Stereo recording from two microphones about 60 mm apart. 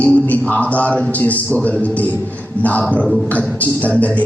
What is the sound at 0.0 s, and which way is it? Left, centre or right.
A man's voice, left.